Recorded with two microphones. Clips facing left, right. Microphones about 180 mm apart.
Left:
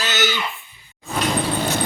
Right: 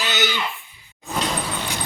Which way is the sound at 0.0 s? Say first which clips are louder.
Left 1 dB; 15° right (ahead or behind).